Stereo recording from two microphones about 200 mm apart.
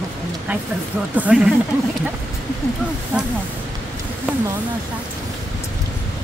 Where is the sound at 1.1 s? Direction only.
5° right (ahead or behind).